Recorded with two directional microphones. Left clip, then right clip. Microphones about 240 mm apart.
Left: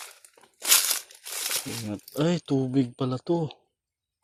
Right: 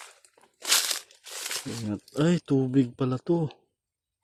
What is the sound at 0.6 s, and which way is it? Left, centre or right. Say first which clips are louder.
Crushing: left 1 dB; left.